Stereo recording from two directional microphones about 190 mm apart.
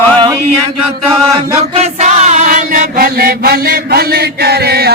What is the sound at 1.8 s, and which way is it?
Chant, 40° right (ahead or behind).